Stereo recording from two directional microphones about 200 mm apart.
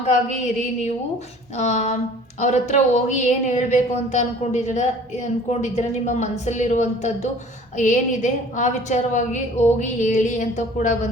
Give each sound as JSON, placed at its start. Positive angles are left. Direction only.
{"t": 0.1, "sound": "a woman's voice", "side_deg": 35}